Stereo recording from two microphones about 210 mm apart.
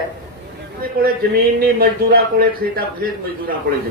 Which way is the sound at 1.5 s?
45° right (ahead or behind).